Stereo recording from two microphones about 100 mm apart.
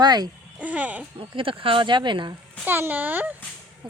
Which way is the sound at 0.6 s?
15° right (ahead or behind).